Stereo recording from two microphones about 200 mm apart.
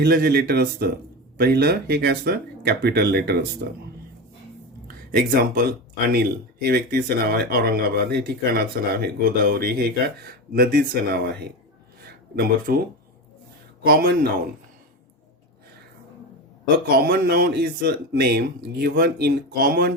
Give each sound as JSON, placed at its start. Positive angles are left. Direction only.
{"t": 0.0, "sound": "speech", "side_deg": -50}
{"t": 5.1, "sound": "speech", "side_deg": -45}
{"t": 13.8, "sound": "speech", "side_deg": -50}
{"t": 17.0, "sound": "speech", "side_deg": -50}